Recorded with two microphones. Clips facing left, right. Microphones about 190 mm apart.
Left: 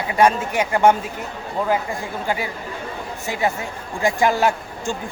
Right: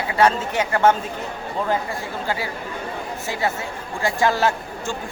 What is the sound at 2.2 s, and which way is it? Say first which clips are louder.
Speech: left 2 dB; 15° left (ahead or behind).